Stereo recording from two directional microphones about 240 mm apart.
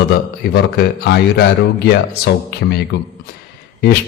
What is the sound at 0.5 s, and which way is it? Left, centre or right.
Speech, left.